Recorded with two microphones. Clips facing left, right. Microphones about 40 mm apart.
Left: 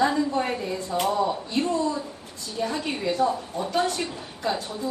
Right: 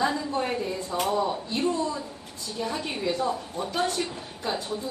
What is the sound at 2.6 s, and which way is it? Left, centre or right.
Speech, left.